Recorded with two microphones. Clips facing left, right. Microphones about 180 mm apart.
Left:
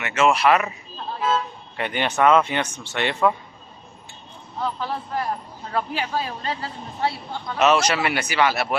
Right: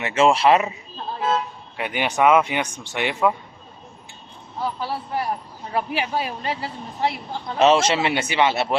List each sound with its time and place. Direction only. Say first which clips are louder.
0.0 s speech: right 2 dB; 30° right (ahead or behind)
1.7 s speech: even; 5° right (ahead or behind)
4.6 s speech: even; 10° right (ahead or behind)
7.4 s speech: right 2 dB; 25° right (ahead or behind)